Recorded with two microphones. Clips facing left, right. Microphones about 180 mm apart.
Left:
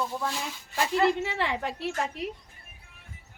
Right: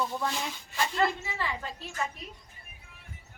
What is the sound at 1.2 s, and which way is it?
A woman's voice, 70° left (ahead or behind).